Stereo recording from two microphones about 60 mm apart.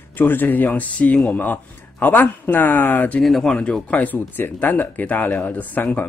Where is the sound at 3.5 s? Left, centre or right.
Centre.